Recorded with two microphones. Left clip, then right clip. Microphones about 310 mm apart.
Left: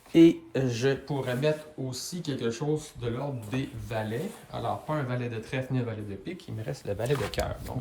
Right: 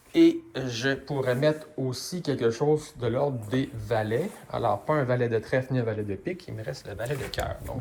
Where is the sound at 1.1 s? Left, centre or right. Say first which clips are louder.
Right 3 dB; centre.